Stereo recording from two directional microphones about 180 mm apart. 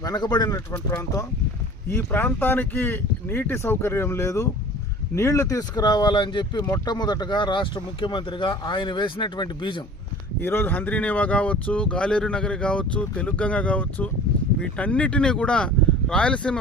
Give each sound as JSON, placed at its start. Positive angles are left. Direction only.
{"t": 0.0, "sound": "speech", "side_deg": 20}
{"t": 10.4, "sound": "speech", "side_deg": 10}